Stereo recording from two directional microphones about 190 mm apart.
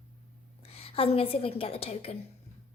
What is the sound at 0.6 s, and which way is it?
A woman's voice, 30° left (ahead or behind).